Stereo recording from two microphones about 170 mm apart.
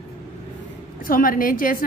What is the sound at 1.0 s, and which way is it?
Speech, 55° left (ahead or behind).